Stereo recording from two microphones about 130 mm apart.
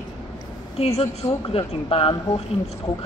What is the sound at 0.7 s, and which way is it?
Speech, 50° left (ahead or behind).